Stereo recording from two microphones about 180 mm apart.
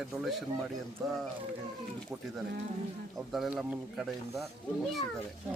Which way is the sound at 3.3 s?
Centre (ahead or behind).